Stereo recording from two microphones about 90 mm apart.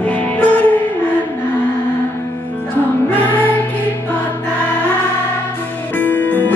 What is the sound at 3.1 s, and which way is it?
Music, 20° left (ahead or behind).